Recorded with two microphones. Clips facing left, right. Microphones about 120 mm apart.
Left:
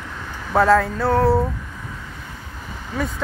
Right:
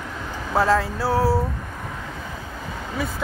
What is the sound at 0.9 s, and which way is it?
Speech, 5° right (ahead or behind).